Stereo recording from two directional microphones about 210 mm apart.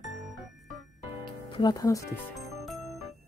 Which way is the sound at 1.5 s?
20° left (ahead or behind).